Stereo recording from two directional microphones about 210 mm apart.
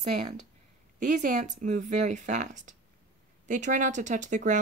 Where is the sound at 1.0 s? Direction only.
35° right (ahead or behind).